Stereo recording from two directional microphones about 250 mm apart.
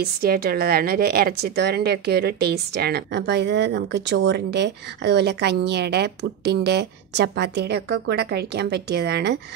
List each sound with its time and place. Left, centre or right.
0.0 s a woman's voice: right